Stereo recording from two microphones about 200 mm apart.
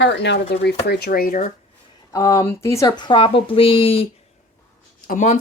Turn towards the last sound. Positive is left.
turn(degrees=40)  # may be behind; listen again after turning